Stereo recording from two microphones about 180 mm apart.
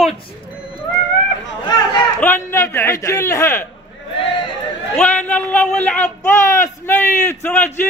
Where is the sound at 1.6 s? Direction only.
25° left (ahead or behind).